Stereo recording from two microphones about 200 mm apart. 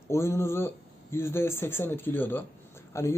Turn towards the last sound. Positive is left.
turn(degrees=15)  # may be behind; listen again after turning